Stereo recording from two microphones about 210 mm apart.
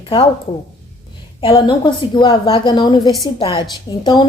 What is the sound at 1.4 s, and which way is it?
A woman's voice, 20° left (ahead or behind).